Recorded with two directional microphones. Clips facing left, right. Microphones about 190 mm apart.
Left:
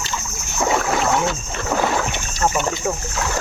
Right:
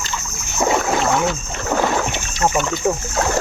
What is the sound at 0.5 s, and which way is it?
Boat, 10° right (ahead or behind).